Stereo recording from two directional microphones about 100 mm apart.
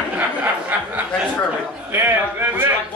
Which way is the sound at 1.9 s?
20° right (ahead or behind).